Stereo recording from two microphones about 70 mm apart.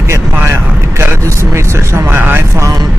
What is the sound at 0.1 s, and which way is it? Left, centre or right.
Vehicle, right.